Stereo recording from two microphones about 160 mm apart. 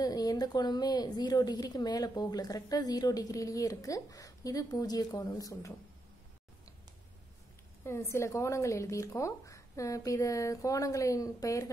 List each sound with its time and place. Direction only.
0.0 s a woman's voice: 25° left (ahead or behind)
7.8 s a woman's voice: 15° left (ahead or behind)